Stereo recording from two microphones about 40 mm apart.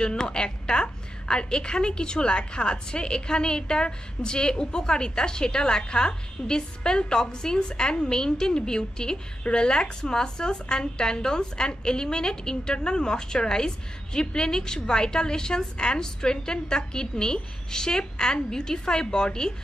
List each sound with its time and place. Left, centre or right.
0.0 s a woman's voice: left